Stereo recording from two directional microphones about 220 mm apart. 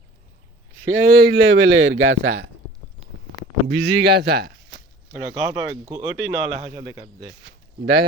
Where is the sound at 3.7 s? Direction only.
50° right (ahead or behind).